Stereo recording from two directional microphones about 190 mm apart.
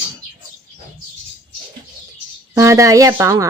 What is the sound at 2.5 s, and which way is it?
Speech, 15° right (ahead or behind).